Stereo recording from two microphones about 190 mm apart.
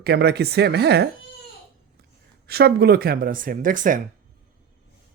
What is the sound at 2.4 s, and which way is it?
Speech, 55° right (ahead or behind).